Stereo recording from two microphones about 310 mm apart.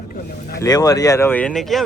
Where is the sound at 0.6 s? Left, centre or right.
Centre.